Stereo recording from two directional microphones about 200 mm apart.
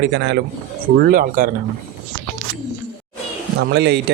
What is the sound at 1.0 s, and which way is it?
Speech, 45° right (ahead or behind).